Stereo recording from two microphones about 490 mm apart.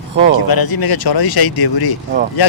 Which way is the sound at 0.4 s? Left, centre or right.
Left.